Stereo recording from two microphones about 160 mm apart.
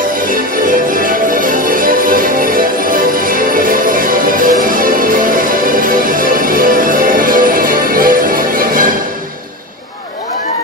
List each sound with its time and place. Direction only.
0.3 s music: 60° right (ahead or behind)